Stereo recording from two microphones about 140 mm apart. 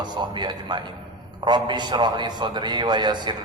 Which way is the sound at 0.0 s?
30° right (ahead or behind).